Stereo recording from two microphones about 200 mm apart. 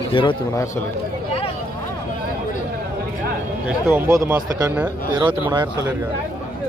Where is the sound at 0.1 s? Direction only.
25° left (ahead or behind).